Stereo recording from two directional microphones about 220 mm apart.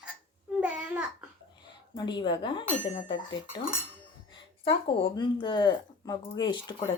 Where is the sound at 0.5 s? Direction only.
5° right (ahead or behind).